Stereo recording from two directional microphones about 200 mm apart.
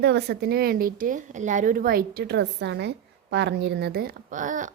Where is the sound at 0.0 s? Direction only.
55° right (ahead or behind).